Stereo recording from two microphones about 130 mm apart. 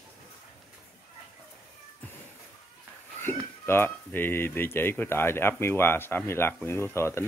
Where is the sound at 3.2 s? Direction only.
15° left (ahead or behind).